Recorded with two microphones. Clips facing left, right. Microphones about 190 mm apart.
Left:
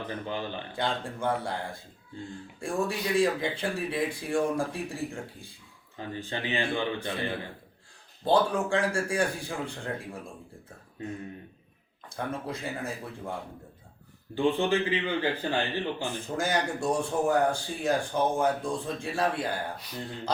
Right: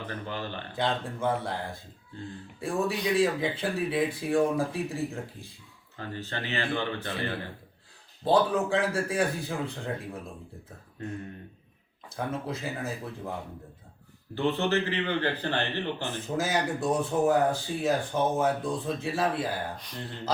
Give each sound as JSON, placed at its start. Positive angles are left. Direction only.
{"t": 0.1, "sound": "a man's voice", "side_deg": 15}
{"t": 0.7, "sound": "speech", "side_deg": 0}
{"t": 6.0, "sound": "a man's voice", "side_deg": 15}
{"t": 8.2, "sound": "speech", "side_deg": 0}
{"t": 12.0, "sound": "speech", "side_deg": 0}
{"t": 14.3, "sound": "a man's voice", "side_deg": 15}
{"t": 16.4, "sound": "speech", "side_deg": -5}